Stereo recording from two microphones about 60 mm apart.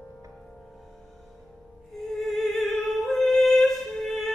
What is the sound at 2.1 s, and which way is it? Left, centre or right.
Music, centre.